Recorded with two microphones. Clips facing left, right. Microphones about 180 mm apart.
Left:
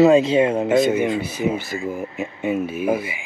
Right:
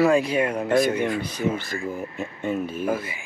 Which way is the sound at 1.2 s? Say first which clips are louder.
Left 3 dB; 5° left (ahead or behind).